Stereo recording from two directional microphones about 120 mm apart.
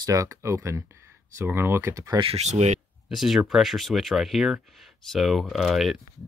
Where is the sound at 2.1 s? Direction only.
55° right (ahead or behind).